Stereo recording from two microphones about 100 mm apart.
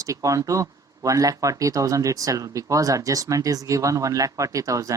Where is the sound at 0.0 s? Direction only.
30° right (ahead or behind).